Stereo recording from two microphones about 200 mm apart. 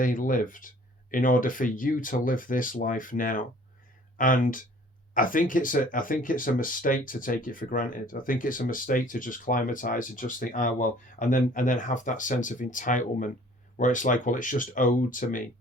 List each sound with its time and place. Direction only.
0.0 s speech: 40° left (ahead or behind)